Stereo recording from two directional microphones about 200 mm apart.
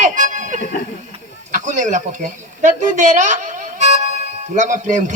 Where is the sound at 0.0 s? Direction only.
40° right (ahead or behind).